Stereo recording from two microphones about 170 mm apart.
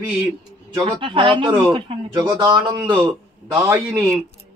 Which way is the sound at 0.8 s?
30° right (ahead or behind).